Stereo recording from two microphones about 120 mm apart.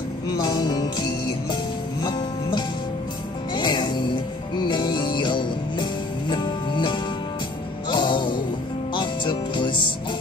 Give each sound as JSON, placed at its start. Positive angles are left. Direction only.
{"t": 0.4, "sound": "music", "side_deg": 35}